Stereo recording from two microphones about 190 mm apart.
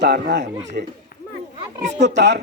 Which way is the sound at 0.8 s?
50° right (ahead or behind).